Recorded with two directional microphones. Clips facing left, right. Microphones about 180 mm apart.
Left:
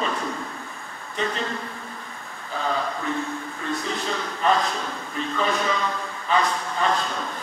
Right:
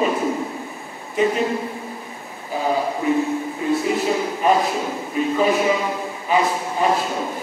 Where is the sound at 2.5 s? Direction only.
10° right (ahead or behind).